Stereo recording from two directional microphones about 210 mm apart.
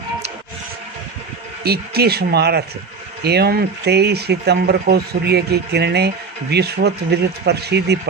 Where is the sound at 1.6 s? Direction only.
50° right (ahead or behind).